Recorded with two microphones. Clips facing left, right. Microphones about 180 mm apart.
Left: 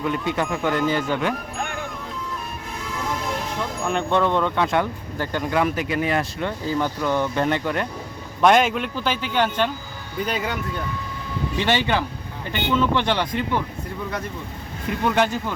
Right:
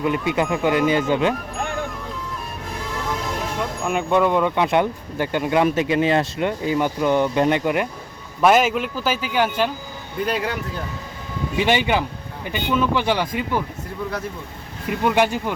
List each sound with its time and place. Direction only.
0.0 s speech: 10° right (ahead or behind)
3.6 s speech: 5° right (ahead or behind)
8.4 s speech: 5° right (ahead or behind)
11.5 s speech: 10° right (ahead or behind)
15.0 s speech: 10° right (ahead or behind)